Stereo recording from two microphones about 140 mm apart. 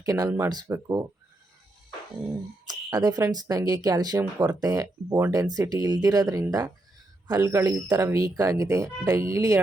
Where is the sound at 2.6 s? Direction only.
30° right (ahead or behind).